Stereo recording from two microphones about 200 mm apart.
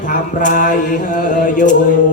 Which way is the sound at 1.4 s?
40° left (ahead or behind).